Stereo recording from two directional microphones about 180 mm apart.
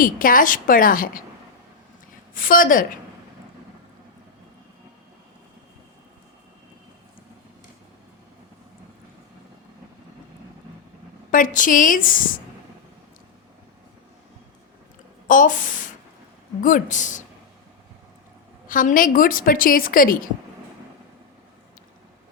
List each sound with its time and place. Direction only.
0.0 s a woman's voice: 50° left (ahead or behind)
2.3 s a woman's voice: 50° left (ahead or behind)
11.3 s a woman's voice: 45° left (ahead or behind)
15.3 s a woman's voice: 45° left (ahead or behind)
18.7 s a woman's voice: 50° left (ahead or behind)